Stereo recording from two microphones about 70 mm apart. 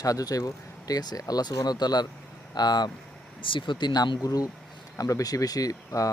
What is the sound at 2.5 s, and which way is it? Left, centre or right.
Speech, left.